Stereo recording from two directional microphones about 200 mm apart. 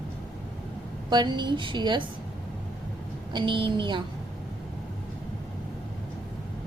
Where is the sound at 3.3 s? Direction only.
25° right (ahead or behind).